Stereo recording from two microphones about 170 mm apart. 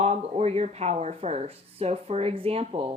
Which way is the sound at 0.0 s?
40° right (ahead or behind).